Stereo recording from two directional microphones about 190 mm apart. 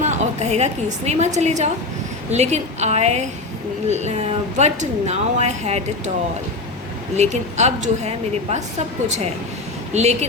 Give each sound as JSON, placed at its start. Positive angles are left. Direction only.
{"t": 0.0, "sound": "a woman's voice", "side_deg": -35}
{"t": 7.2, "sound": "speech", "side_deg": -35}